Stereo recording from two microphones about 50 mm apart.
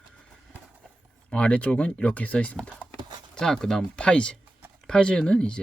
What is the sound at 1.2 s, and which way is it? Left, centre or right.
Speech, left.